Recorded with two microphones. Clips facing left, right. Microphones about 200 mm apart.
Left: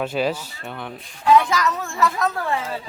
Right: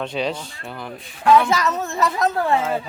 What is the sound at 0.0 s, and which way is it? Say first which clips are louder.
Speech: left 2 dB; 5° left (ahead or behind).